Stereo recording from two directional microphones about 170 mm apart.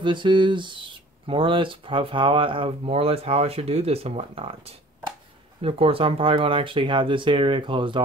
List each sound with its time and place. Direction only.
0.0 s speech: 30° right (ahead or behind)